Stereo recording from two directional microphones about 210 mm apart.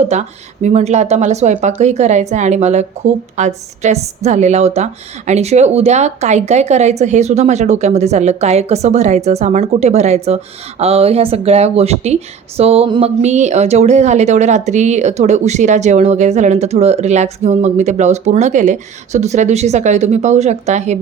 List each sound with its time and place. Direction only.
0.0 s a woman's voice: 35° right (ahead or behind)